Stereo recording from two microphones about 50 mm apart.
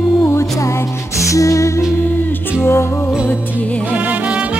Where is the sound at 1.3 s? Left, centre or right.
Left.